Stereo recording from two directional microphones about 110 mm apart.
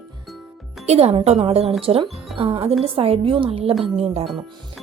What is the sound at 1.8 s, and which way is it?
A woman's voice, 55° right (ahead or behind).